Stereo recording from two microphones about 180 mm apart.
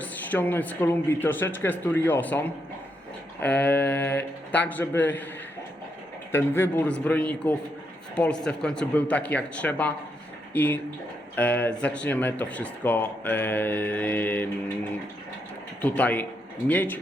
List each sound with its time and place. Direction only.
0.0 s speech: 10° left (ahead or behind)
6.3 s speech: 10° left (ahead or behind)
15.8 s speech: 10° left (ahead or behind)